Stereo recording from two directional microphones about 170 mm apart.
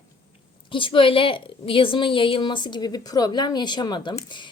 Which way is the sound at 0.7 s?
30° left (ahead or behind).